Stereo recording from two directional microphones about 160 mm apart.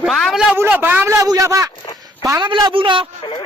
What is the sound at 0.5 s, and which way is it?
A man's voice, 15° right (ahead or behind).